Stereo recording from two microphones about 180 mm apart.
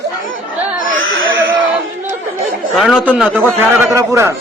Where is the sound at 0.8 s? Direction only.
90° right.